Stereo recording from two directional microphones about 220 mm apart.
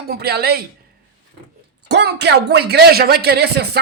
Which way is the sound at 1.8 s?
50° right (ahead or behind).